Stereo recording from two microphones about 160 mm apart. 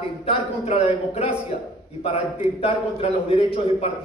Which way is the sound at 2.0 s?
40° left (ahead or behind).